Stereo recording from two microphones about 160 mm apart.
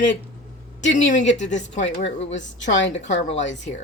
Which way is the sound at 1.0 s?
50° left (ahead or behind).